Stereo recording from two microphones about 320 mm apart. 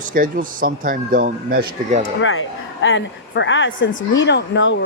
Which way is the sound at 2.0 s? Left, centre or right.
Left.